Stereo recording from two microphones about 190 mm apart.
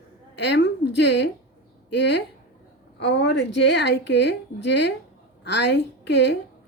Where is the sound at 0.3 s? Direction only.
65° left (ahead or behind).